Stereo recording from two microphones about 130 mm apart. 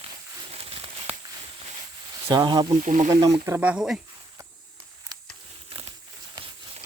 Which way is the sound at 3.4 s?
15° right (ahead or behind).